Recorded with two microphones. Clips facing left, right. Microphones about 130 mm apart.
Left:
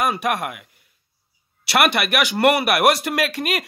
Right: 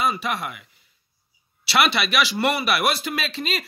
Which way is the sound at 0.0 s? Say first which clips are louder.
Left 3 dB; 65° left (ahead or behind).